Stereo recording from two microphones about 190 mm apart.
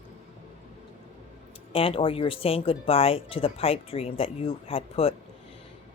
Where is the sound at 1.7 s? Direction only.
30° left (ahead or behind).